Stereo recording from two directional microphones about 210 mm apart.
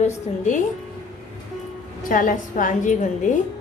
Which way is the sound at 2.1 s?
40° left (ahead or behind).